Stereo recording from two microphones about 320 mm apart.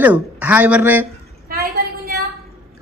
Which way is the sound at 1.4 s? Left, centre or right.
Right.